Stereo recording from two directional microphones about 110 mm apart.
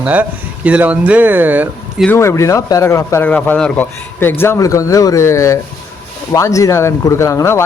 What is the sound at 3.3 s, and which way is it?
Speech, 10° left (ahead or behind).